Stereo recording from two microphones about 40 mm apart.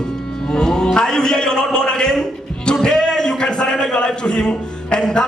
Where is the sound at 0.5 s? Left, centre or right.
Centre.